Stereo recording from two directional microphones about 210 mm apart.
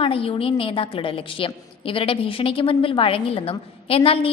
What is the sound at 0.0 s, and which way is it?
A woman's voice, 25° left (ahead or behind).